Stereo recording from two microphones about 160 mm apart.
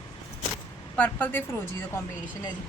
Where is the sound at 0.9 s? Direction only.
10° left (ahead or behind).